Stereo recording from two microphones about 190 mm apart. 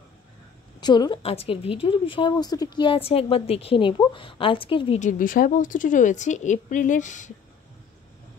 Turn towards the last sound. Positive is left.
turn(degrees=40)  # may be behind; listen again after turning